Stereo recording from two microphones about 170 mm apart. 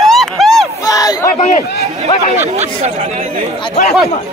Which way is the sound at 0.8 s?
20° left (ahead or behind).